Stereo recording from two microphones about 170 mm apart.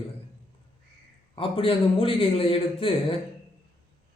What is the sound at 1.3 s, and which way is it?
Speech, 30° left (ahead or behind).